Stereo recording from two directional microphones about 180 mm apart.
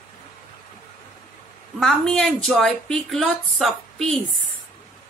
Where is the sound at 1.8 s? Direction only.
Centre (ahead or behind).